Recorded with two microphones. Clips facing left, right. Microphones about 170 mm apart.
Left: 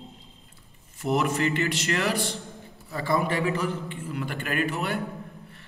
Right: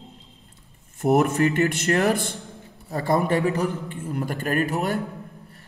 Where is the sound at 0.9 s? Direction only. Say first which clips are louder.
Right 6 dB; 50° right (ahead or behind).